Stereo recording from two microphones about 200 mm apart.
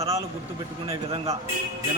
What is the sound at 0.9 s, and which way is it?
Speech, 25° right (ahead or behind).